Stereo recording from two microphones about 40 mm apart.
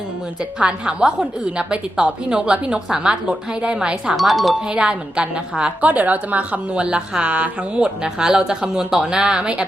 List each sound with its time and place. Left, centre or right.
0.6 s a woman's voice: right
4.2 s speech: centre
4.7 s a woman's voice: right